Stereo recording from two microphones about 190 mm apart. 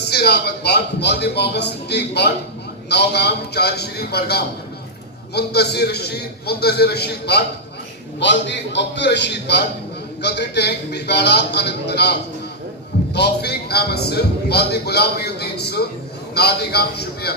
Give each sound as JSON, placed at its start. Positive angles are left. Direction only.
{"t": 0.1, "sound": "a man's voice", "side_deg": 60}
{"t": 13.1, "sound": "a man's voice", "side_deg": 60}